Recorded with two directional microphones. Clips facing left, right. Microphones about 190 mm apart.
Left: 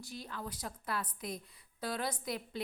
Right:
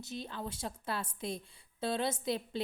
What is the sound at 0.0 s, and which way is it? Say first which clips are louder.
A woman's voice: right 3 dB; 25° right (ahead or behind).